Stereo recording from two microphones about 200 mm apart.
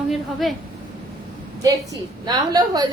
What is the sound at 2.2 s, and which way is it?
Speech, 20° right (ahead or behind).